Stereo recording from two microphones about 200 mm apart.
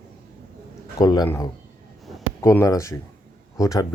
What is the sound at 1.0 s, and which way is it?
Speech, 20° left (ahead or behind).